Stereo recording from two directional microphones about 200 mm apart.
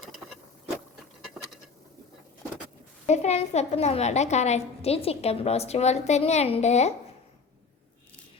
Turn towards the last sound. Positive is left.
turn(degrees=35)  # may be behind; listen again after turning